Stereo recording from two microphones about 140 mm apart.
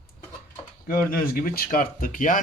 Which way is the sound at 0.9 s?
90° left.